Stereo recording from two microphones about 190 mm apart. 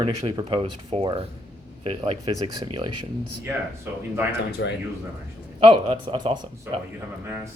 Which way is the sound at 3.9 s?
10° right (ahead or behind).